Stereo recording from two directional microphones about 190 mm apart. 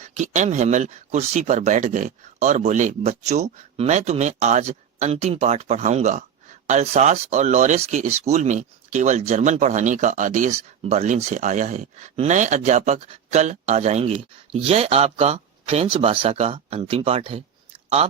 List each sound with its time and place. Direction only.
0.0 s speech: 40° right (ahead or behind)